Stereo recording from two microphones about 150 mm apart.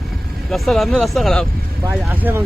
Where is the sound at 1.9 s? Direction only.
10° right (ahead or behind).